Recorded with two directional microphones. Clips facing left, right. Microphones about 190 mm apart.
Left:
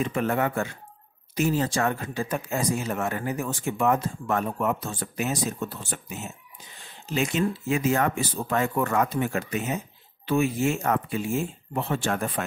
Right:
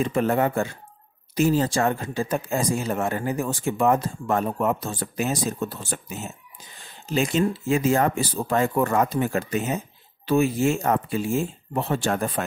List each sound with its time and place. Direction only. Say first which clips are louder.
0.0 s speech: right 3 dB; 35° right (ahead or behind)
7.2 s speech: right 3 dB; 30° right (ahead or behind)